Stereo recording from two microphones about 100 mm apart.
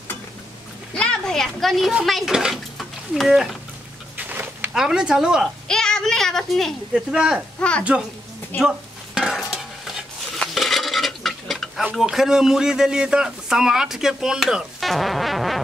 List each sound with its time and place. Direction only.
0.9 s speech: 5° left (ahead or behind)
4.2 s a sound: 20° right (ahead or behind)
4.7 s speech: 5° right (ahead or behind)
5.7 s a child's voice: 5° left (ahead or behind)
6.9 s speech: 10° right (ahead or behind)
7.6 s speech: 10° left (ahead or behind)
8.5 s stir: 5° right (ahead or behind)
12.0 s speech: 5° right (ahead or behind)